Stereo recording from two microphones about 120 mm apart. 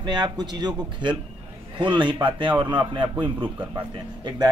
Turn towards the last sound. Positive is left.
turn(degrees=-35)  # may be behind; listen again after turning